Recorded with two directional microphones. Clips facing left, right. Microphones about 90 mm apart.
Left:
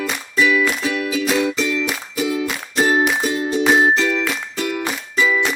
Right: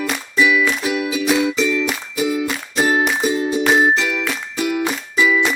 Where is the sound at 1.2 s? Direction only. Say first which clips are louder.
Right 3 dB; 5° right (ahead or behind).